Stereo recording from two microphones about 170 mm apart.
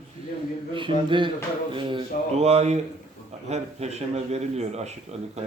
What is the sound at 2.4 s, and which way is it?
A man's voice, 40° right (ahead or behind).